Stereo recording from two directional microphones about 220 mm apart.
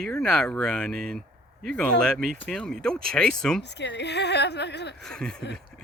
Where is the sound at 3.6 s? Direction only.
50° left (ahead or behind).